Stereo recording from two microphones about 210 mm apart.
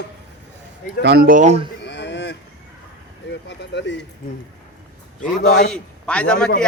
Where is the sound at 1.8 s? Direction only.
55° left (ahead or behind).